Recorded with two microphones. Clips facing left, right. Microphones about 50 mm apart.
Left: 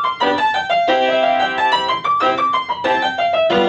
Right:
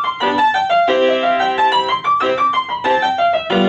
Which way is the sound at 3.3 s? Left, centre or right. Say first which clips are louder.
Left 1 dB; centre.